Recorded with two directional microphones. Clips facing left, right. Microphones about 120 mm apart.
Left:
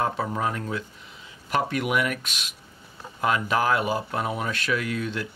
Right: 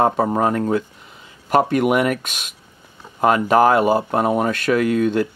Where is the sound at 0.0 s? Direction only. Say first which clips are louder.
Right 9 dB; 45° right (ahead or behind).